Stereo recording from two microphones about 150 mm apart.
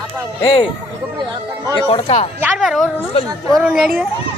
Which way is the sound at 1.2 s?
30° right (ahead or behind).